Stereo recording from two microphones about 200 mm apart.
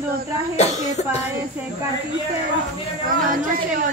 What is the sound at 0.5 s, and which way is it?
Speech, 35° left (ahead or behind).